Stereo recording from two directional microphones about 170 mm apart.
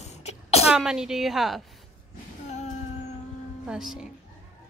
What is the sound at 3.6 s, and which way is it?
Speech, 5° right (ahead or behind).